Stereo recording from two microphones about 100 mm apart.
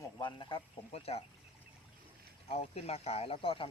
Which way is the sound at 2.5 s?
90° left.